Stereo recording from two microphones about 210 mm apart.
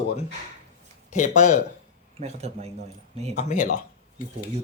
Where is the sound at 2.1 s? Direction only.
30° right (ahead or behind).